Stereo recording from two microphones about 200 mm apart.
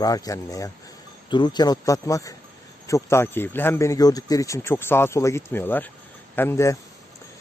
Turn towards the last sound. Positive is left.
turn(degrees=15)  # may be behind; listen again after turning